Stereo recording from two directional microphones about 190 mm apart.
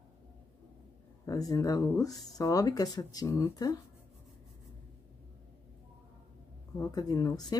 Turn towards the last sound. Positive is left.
turn(degrees=20)  # may be behind; listen again after turning